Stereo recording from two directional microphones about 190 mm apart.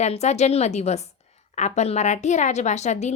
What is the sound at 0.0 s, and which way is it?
Speech, 35° left (ahead or behind).